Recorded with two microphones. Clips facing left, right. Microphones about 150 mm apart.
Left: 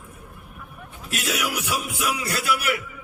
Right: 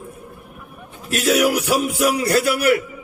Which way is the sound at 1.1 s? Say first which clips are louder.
Right 10 dB; 45° right (ahead or behind).